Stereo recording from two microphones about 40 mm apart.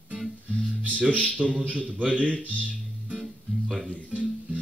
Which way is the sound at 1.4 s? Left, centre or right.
Right.